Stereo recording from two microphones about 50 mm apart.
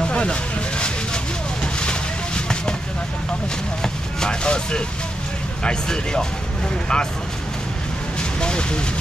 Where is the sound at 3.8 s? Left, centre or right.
Centre.